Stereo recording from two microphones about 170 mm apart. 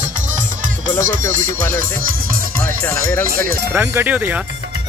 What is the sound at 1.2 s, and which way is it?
Music, 10° left (ahead or behind).